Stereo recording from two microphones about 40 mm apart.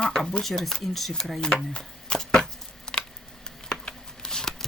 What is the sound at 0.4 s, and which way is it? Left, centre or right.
Speech, centre.